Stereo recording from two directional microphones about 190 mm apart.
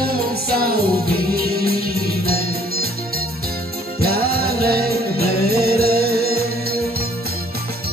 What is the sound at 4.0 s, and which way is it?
Music, 55° right (ahead or behind).